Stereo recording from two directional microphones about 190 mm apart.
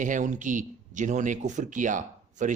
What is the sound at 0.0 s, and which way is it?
Speech, 40° right (ahead or behind).